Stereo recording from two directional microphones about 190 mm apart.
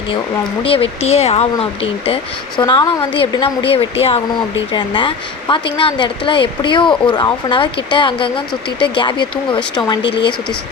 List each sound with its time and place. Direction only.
0.6 s speech: 30° left (ahead or behind)